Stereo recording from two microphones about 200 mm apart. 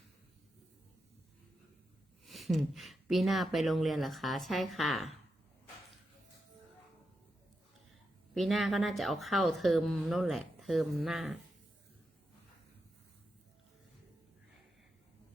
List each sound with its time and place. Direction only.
2.2 s a woman's voice: centre (ahead or behind)
8.3 s a woman's voice: centre (ahead or behind)